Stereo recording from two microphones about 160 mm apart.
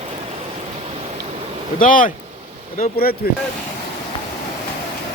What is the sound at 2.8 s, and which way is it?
Speech, 65° left (ahead or behind).